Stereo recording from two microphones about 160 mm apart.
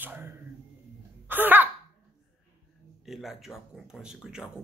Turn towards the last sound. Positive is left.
turn(degrees=-5)  # may be behind; listen again after turning